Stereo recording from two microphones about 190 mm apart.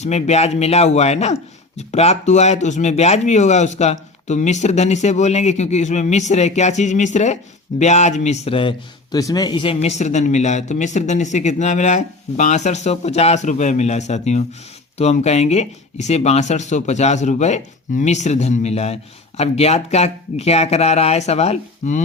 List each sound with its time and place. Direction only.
0.0 s a man's voice: 35° left (ahead or behind)